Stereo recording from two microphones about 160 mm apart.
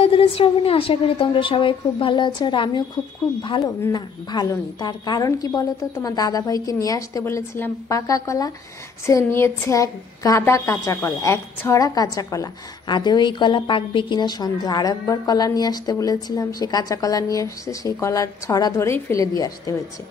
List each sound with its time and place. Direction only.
0.0 s a woman's voice: 35° left (ahead or behind)